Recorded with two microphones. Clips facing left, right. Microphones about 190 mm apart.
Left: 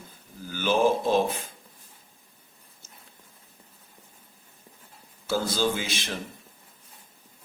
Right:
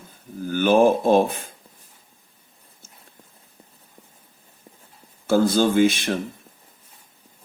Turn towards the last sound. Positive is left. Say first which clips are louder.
# right 12 dB
turn(degrees=-55)  # may be behind; listen again after turning